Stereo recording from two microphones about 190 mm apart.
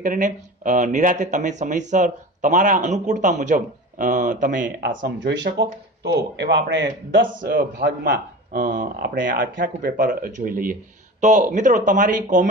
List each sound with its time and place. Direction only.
0.0 s speech: 45° right (ahead or behind)
5.0 s speech: 65° right (ahead or behind)
7.5 s speech: 50° right (ahead or behind)